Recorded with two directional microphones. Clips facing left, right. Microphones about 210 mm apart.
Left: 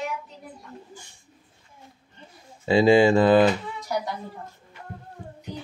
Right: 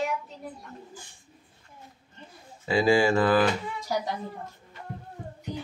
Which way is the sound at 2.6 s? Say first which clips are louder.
Left 5 dB; 25° left (ahead or behind).